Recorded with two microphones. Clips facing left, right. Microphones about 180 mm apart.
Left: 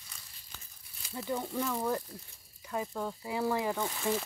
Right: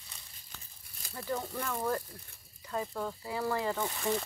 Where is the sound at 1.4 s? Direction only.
5° left (ahead or behind).